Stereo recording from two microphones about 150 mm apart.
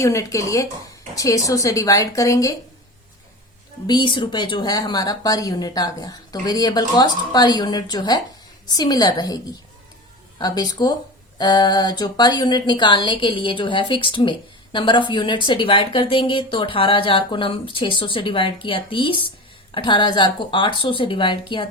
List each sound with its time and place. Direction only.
0.0 s a woman's voice: 20° left (ahead or behind)
3.8 s a woman's voice: 30° left (ahead or behind)